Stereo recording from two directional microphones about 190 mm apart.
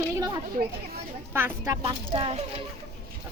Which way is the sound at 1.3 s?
10° right (ahead or behind).